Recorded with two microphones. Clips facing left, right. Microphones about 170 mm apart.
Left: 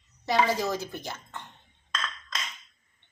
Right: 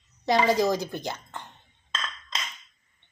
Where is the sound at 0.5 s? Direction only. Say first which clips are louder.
Right 6 dB; 15° right (ahead or behind).